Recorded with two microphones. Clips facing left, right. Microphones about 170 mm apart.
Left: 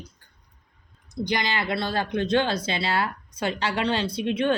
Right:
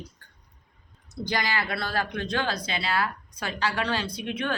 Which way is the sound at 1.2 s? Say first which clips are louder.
Left 2 dB; 20° left (ahead or behind).